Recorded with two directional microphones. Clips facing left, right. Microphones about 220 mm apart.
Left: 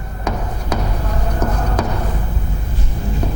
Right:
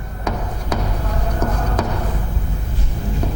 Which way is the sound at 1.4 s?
25° left (ahead or behind).